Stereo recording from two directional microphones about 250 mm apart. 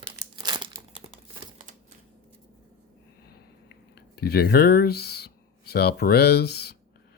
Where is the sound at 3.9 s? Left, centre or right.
Left.